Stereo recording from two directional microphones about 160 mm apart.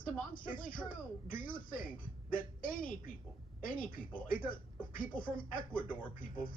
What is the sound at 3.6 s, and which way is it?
Speech, 60° left (ahead or behind).